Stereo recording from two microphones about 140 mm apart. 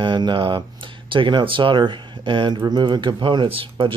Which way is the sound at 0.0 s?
35° right (ahead or behind).